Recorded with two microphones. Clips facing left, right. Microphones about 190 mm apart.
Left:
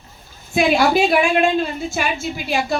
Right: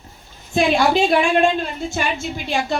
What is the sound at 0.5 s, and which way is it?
A woman's voice, 5° left (ahead or behind).